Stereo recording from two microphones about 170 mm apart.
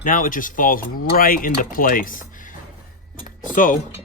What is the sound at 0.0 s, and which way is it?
Speech, 50° left (ahead or behind).